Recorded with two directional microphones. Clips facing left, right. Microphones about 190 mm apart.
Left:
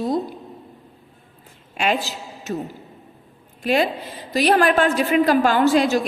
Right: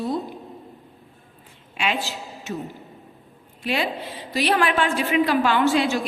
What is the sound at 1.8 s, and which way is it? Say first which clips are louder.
Speech: left 4 dB; 40° left (ahead or behind).